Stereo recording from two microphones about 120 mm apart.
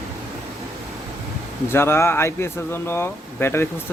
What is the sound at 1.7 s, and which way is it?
Speech, 20° left (ahead or behind).